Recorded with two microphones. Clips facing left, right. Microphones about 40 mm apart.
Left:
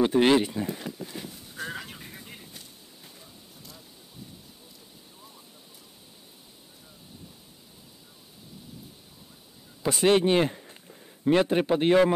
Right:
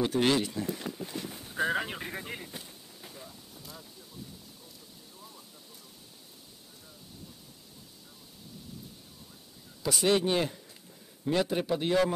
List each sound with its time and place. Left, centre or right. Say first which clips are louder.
0.0 s speech: left 6 dB; left
1.3 s vehicle: right 7 dB; right
3.1 s wind noise: right 2 dB; centre
9.8 s speech: left 5 dB; left